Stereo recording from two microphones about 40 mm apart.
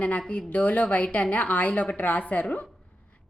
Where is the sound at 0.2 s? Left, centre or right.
Left.